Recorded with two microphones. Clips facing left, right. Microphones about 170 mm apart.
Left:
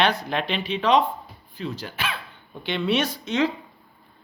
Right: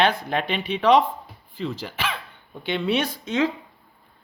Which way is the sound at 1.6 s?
90° right.